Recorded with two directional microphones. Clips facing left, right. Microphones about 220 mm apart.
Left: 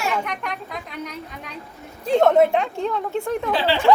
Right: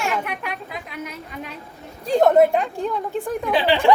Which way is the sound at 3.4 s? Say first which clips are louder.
Right 5 dB; 15° right (ahead or behind).